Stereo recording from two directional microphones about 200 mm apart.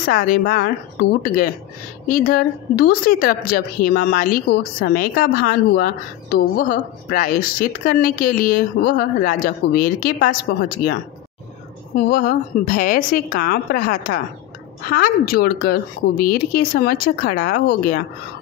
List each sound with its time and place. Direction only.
0.0 s a woman's voice: 45° left (ahead or behind)
0.4 s speech: 65° left (ahead or behind)
1.2 s a woman's voice: 50° left (ahead or behind)